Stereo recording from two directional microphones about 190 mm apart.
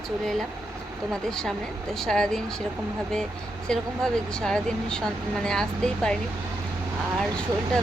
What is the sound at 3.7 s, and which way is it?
Speech, 5° left (ahead or behind).